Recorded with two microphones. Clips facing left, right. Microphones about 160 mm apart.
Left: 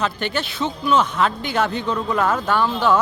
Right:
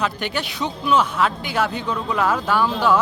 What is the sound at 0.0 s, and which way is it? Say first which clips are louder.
Speech: left 1 dB; 15° right (ahead or behind).